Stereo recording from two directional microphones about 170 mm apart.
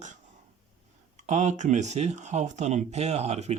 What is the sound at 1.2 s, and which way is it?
Speech, 45° right (ahead or behind).